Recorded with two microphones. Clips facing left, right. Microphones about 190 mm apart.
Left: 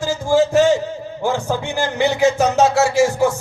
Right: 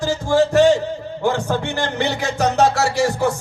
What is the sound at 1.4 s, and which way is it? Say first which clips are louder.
Speech: left 1 dB; 15° left (ahead or behind).